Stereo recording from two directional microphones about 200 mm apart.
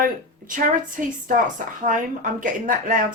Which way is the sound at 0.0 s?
40° right (ahead or behind).